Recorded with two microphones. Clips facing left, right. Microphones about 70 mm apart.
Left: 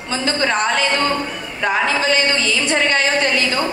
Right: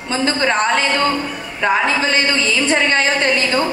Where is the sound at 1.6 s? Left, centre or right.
Right.